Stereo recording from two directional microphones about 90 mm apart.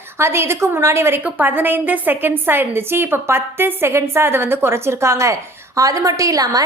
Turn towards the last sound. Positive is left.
turn(degrees=-40)  # may be behind; listen again after turning